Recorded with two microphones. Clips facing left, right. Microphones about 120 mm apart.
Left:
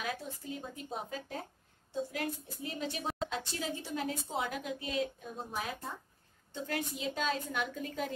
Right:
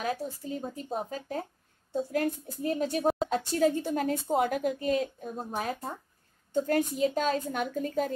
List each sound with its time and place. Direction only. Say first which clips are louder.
0.0 s speech: right 7 dB; 40° right (ahead or behind)